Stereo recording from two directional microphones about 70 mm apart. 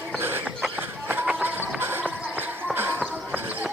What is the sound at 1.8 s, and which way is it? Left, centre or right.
Music, right.